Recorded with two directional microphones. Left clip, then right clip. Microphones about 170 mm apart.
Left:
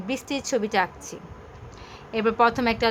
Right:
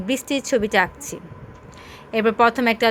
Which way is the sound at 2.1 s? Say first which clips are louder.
Right 4 dB; 20° right (ahead or behind).